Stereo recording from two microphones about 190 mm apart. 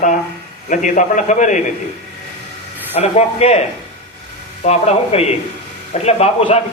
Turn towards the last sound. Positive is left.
turn(degrees=35)  # may be behind; listen again after turning